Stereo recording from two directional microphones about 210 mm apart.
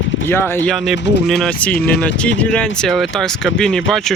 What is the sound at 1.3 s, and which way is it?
Speech, 5° left (ahead or behind).